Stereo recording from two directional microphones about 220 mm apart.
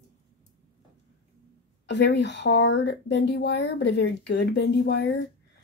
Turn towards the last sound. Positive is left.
turn(degrees=50)  # may be behind; listen again after turning